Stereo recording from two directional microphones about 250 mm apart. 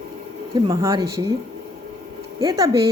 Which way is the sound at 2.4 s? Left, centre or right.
Centre.